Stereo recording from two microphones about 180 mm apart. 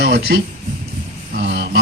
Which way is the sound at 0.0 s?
60° right (ahead or behind).